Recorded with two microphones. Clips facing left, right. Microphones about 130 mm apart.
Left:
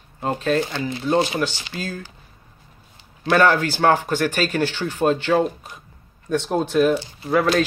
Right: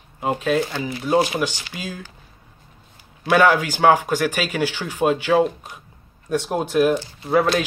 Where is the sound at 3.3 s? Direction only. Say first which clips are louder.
Right 1 dB; 10° right (ahead or behind).